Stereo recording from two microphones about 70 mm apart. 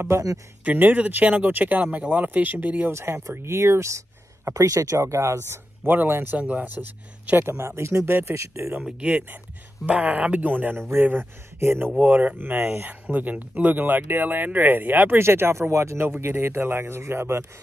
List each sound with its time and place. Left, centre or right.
0.1 s speech: right
0.7 s speech: right
2.9 s speech: right
5.9 s speech: right
8.8 s speech: centre; by 11.9 s right
12.0 s speech: centre; by 16.1 s right
16.1 s speech: right